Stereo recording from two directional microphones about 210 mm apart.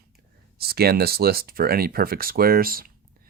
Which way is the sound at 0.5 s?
50° right (ahead or behind).